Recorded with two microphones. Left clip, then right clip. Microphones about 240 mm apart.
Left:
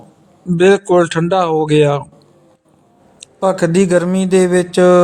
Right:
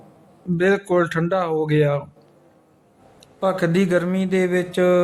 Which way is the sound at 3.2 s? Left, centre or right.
Centre.